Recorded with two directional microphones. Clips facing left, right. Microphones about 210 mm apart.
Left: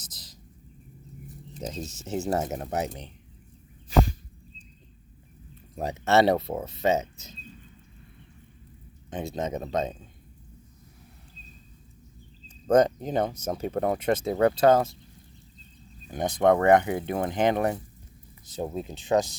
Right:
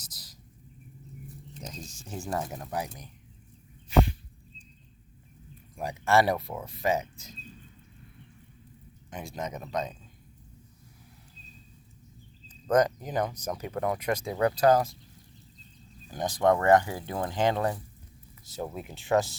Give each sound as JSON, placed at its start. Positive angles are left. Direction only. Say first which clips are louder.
{"t": 0.0, "sound": "bird", "louder": "left 3 dB", "side_deg": 20}
{"t": 2.0, "sound": "speech", "louder": "left 6 dB", "side_deg": 25}
{"t": 3.8, "sound": "a sound", "louder": "left 1 dB", "side_deg": 40}
{"t": 5.7, "sound": "speech", "louder": "left 2 dB", "side_deg": 25}
{"t": 9.0, "sound": "speech", "louder": "left 6 dB", "side_deg": 25}
{"t": 12.6, "sound": "speech", "louder": "left 4 dB", "side_deg": 25}
{"t": 16.0, "sound": "speech", "louder": "left 3 dB", "side_deg": 20}